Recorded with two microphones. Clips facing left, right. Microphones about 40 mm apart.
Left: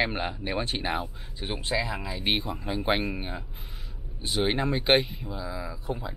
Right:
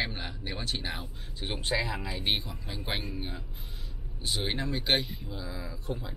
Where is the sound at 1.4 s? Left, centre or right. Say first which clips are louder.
Left 2 dB; centre.